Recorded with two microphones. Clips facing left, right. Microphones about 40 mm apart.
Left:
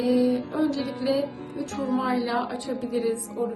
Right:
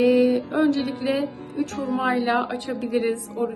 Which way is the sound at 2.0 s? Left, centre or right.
Right.